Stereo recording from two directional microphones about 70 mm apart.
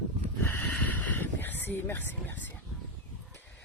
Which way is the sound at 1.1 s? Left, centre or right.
Left.